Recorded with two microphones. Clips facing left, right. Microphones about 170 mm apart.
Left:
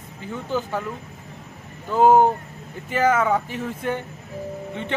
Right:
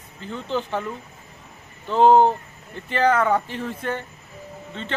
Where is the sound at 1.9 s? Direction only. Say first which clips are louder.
Even; 10° left (ahead or behind).